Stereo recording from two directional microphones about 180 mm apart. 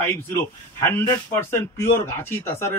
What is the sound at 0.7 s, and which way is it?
Speech, 15° left (ahead or behind).